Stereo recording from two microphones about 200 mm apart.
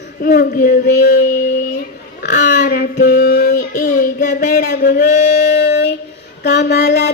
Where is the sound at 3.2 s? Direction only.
55° left (ahead or behind).